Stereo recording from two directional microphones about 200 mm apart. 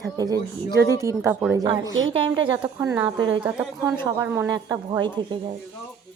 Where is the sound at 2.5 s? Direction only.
15° right (ahead or behind).